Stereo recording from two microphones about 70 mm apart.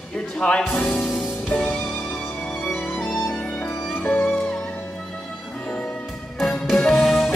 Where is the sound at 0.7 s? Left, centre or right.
Left.